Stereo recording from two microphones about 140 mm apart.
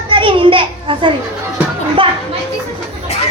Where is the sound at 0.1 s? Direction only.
40° right (ahead or behind).